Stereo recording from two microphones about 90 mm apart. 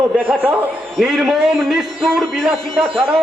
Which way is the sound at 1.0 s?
5° right (ahead or behind).